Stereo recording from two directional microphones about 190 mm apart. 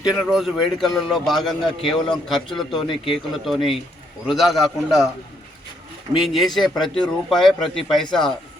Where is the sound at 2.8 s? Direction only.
25° left (ahead or behind).